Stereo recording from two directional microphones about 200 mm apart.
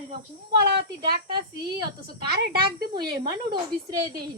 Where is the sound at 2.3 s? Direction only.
50° right (ahead or behind).